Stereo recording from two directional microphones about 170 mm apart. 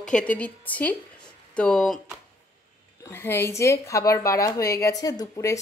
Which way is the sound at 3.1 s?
15° left (ahead or behind).